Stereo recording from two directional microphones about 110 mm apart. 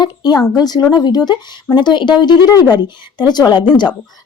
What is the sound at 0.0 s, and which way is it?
A woman's voice, 40° left (ahead or behind).